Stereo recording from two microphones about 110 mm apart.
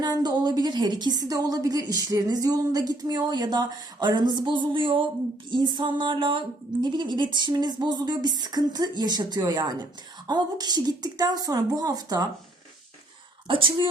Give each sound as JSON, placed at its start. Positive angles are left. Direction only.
{"t": 0.0, "sound": "a woman's voice", "side_deg": -40}
{"t": 5.5, "sound": "music", "side_deg": -45}
{"t": 6.9, "sound": "a woman's voice", "side_deg": -45}
{"t": 13.5, "sound": "music", "side_deg": -50}